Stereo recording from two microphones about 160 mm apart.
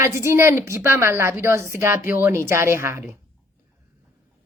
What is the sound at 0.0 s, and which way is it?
A woman's voice, 15° right (ahead or behind).